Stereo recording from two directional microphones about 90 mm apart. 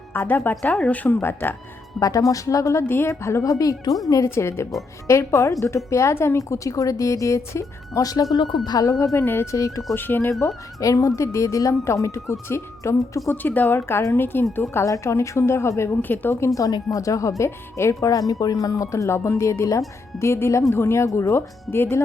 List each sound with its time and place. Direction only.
0.1 s a woman's voice: 25° left (ahead or behind)
2.0 s a woman's voice: 40° left (ahead or behind)
2.8 s a woman's voice: 25° left (ahead or behind); by 8.4 s 45° left (ahead or behind)
8.4 s speech: 55° left (ahead or behind)
9.1 s a woman's voice: 25° left (ahead or behind)
9.6 s a woman's voice: 40° left (ahead or behind)
9.9 s a woman's voice: 25° left (ahead or behind)
10.4 s a woman's voice: 35° left (ahead or behind)
13.3 s a woman's voice: 20° left (ahead or behind)
16.6 s a woman's voice: 40° left (ahead or behind)